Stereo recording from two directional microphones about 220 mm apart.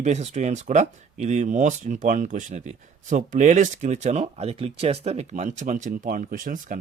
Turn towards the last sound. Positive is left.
turn(degrees=-40)  # may be behind; listen again after turning